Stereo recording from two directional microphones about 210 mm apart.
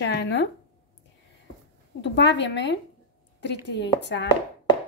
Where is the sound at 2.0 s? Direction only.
55° left (ahead or behind).